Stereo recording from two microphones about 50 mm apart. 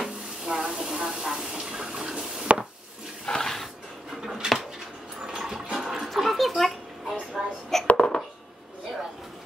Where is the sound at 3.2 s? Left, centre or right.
Centre.